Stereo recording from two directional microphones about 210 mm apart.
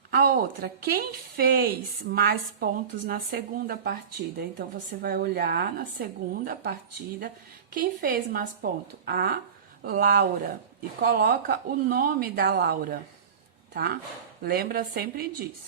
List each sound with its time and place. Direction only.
0.1 s speech: 45° right (ahead or behind)
5.0 s speech: 45° right (ahead or behind)